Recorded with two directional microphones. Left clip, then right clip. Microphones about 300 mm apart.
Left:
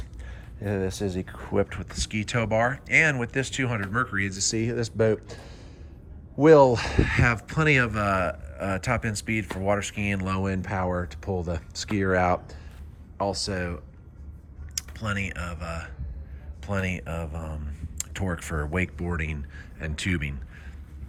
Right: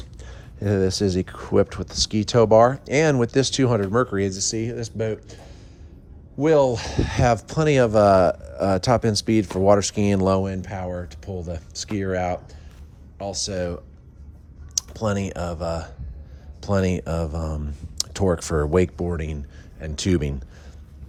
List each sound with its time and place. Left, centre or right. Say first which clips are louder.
1.7 s speech: right 7 dB; centre